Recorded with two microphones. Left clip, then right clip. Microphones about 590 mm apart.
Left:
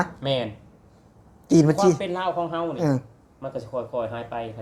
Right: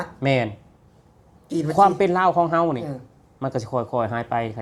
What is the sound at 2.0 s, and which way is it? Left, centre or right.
Speech, right.